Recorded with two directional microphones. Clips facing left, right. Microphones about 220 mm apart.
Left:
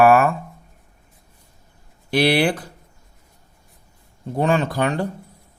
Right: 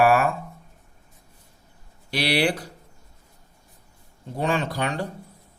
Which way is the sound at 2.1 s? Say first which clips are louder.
Left 5 dB; 55° left (ahead or behind).